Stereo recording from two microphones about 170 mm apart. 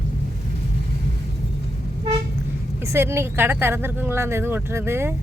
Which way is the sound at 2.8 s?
15° right (ahead or behind).